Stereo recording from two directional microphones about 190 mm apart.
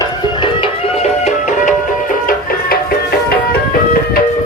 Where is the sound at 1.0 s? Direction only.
40° left (ahead or behind).